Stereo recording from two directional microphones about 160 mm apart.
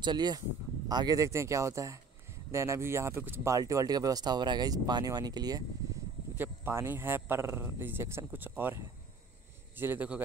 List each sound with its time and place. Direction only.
0.0 s speech: 25° right (ahead or behind)
6.3 s speech: 15° right (ahead or behind)